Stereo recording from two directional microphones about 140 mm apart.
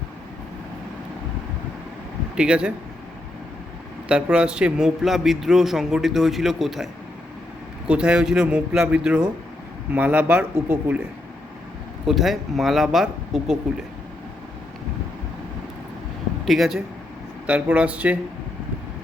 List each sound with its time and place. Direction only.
2.3 s speech: 5° right (ahead or behind)
4.1 s speech: 5° right (ahead or behind)
7.9 s speech: 5° right (ahead or behind)
12.0 s speech: centre (ahead or behind)
16.5 s speech: 5° right (ahead or behind)